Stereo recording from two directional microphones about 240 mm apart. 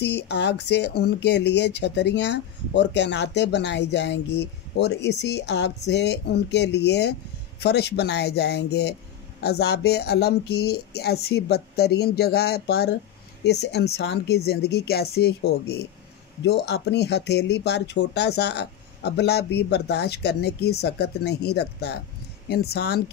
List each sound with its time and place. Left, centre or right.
0.0 s speech: left